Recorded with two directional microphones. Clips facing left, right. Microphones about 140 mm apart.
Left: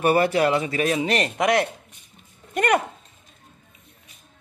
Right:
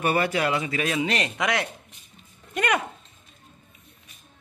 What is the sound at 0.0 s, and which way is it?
Speech, 40° left (ahead or behind).